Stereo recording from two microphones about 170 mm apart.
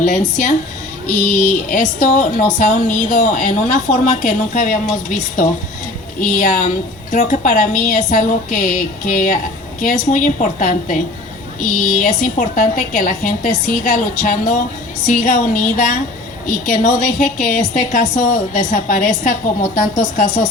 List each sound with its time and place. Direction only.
0.0 s a woman's voice: 45° left (ahead or behind)